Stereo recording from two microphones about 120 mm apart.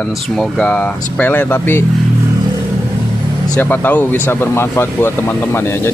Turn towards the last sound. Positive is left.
turn(degrees=20)  # may be behind; listen again after turning